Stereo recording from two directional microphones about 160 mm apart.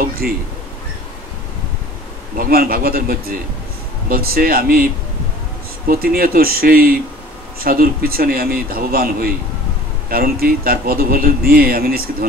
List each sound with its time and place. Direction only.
2.3 s speech: 65° right (ahead or behind)
5.9 s speech: 70° right (ahead or behind)